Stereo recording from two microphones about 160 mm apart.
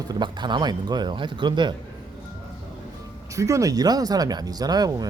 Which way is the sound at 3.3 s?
20° right (ahead or behind).